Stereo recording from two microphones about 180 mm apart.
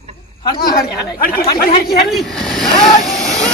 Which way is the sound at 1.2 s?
55° left (ahead or behind).